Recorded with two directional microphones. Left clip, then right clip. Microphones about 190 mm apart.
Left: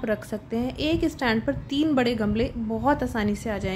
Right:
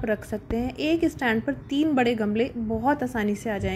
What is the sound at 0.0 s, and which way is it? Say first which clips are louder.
A woman's voice: even; 5° right (ahead or behind).